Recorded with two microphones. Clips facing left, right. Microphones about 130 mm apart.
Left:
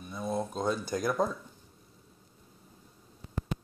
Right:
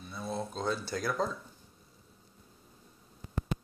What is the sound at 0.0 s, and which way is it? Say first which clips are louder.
Speech: left 4 dB; 15° left (ahead or behind).